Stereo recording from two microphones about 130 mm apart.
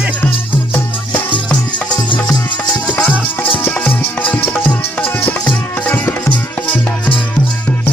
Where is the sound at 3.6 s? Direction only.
10° left (ahead or behind).